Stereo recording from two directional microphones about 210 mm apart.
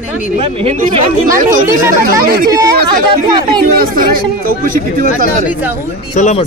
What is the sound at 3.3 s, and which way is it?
Speech, 20° right (ahead or behind).